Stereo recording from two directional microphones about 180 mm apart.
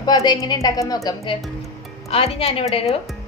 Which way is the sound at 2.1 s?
35° left (ahead or behind).